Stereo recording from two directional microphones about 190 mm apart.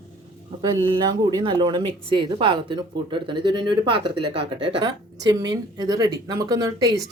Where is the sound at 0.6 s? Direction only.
25° right (ahead or behind).